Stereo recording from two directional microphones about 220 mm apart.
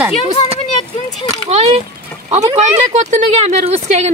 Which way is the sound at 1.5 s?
30° right (ahead or behind).